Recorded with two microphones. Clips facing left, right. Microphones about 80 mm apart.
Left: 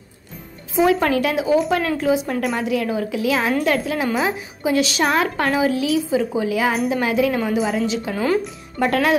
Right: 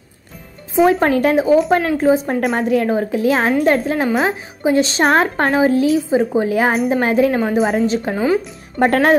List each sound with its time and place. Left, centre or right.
0.8 s a woman's voice: right